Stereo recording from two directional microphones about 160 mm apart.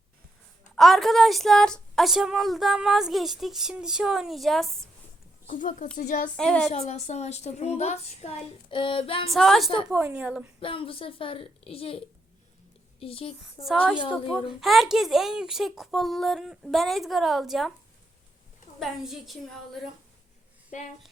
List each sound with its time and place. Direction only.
0.8 s a woman's voice: centre (ahead or behind)
5.5 s a woman's voice: 55° left (ahead or behind)
6.3 s a woman's voice: 5° left (ahead or behind)
6.7 s a woman's voice: 45° left (ahead or behind)
9.3 s a woman's voice: centre (ahead or behind)
10.6 s a woman's voice: 35° left (ahead or behind)
13.0 s a woman's voice: 35° left (ahead or behind)
13.4 s a woman's voice: centre (ahead or behind)
18.8 s a woman's voice: centre (ahead or behind)
20.7 s a woman's voice: 50° left (ahead or behind)